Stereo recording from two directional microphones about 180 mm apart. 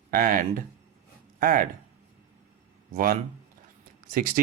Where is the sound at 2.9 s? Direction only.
55° right (ahead or behind).